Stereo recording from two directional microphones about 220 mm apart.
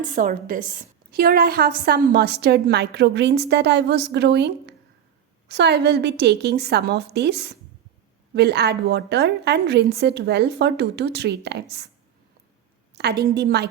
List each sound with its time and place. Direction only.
0.0 s a woman's voice: 35° right (ahead or behind)
12.9 s a woman's voice: 50° right (ahead or behind)